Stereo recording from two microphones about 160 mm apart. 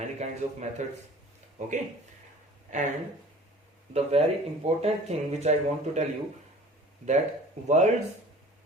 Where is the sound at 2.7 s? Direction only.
50° right (ahead or behind).